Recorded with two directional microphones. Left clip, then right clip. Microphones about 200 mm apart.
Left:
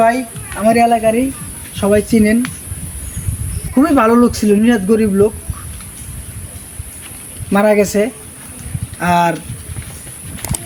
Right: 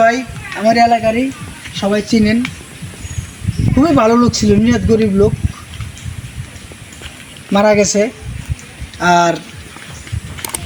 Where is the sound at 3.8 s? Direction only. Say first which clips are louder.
Even; centre (ahead or behind).